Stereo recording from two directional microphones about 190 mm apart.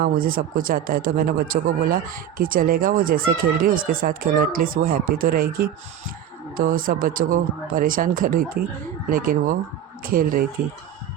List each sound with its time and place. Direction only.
0.0 s speech: 50° right (ahead or behind)